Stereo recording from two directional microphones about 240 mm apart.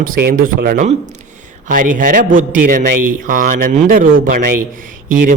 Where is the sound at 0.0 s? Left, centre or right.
Right.